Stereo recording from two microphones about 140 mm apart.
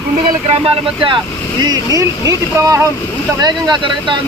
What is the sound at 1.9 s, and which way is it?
Speech, 25° right (ahead or behind).